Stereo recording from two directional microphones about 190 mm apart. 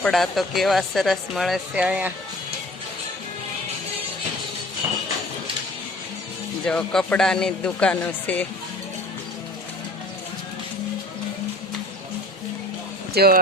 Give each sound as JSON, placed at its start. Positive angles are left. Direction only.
{"t": 0.0, "sound": "speech", "side_deg": 0}
{"t": 6.7, "sound": "speech", "side_deg": 5}
{"t": 13.1, "sound": "speech", "side_deg": -55}